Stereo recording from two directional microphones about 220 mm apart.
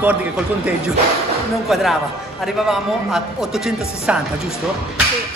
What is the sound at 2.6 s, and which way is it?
A man's voice, centre (ahead or behind).